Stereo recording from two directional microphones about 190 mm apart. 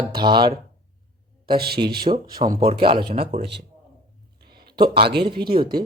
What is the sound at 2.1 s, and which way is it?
Speech, 35° right (ahead or behind).